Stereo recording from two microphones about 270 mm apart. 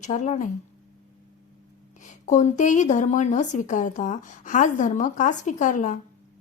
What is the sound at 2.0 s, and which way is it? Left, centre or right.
Speech, left.